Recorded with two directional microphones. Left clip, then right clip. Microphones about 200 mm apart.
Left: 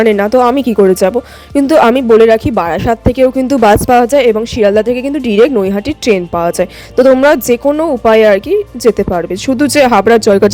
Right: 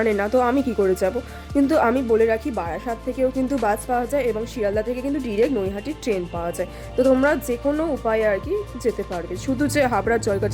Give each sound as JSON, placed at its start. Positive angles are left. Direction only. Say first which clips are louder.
{"t": 0.0, "sound": "a woman's voice", "louder": "left 11 dB", "side_deg": 40}